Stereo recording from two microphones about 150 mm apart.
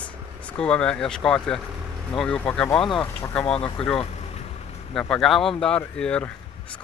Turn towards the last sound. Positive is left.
turn(degrees=5)  # may be behind; listen again after turning